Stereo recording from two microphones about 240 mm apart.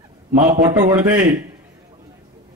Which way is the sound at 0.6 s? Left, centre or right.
Centre.